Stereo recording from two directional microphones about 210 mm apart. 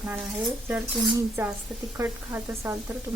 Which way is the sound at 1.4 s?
15° right (ahead or behind).